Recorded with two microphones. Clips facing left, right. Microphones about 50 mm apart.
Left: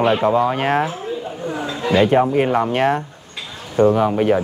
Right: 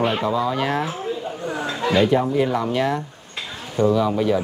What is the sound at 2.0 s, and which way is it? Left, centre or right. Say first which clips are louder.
Speech: left 4 dB; left.